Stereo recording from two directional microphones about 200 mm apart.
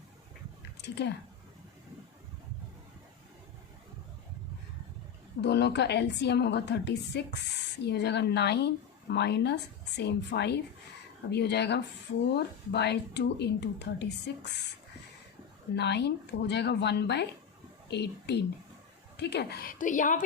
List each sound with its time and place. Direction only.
0.8 s speech: 60° left (ahead or behind)
5.4 s a woman's voice: 60° left (ahead or behind)
15.7 s a woman's voice: 55° left (ahead or behind); by 20.2 s 40° left (ahead or behind)